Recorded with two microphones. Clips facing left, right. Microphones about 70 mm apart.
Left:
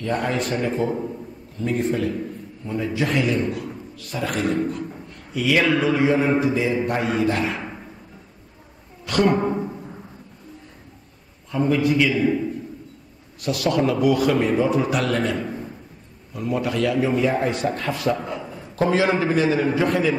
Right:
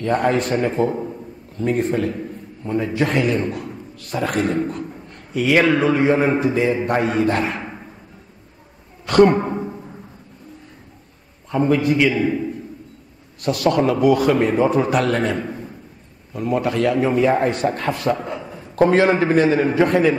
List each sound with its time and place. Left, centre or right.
0.0 s a man's voice: right
9.0 s a woman's voice: right
11.5 s a man's voice: right
13.4 s a man's voice: right